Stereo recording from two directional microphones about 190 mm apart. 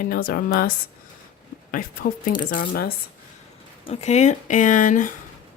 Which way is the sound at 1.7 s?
50° left (ahead or behind).